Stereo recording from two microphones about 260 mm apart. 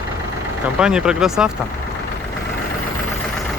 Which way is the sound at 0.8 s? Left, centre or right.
Centre.